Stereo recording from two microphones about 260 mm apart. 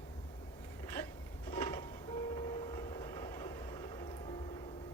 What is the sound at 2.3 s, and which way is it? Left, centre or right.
Vehicle, centre.